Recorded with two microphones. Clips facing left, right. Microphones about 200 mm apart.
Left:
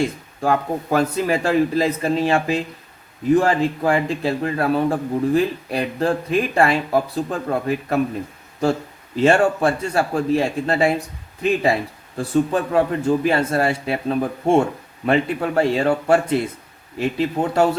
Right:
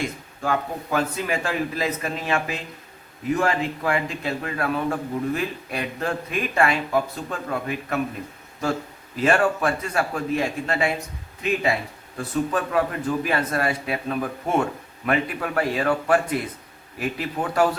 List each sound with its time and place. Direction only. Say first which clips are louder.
0.0 s a man's voice: left 6 dB; 35° left (ahead or behind)
9.1 s a man's voice: left 5 dB; 25° left (ahead or behind)